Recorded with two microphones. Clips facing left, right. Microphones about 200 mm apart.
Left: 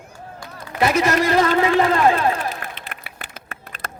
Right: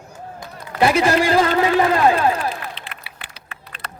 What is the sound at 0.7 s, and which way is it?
Speech, 30° right (ahead or behind).